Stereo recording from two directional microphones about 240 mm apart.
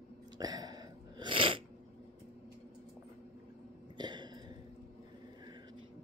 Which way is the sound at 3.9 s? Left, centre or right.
Centre.